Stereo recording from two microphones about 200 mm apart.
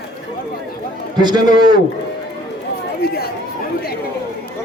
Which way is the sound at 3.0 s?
50° left (ahead or behind).